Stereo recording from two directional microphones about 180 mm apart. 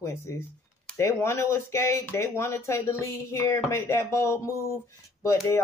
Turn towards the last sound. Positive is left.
turn(degrees=15)  # may be behind; listen again after turning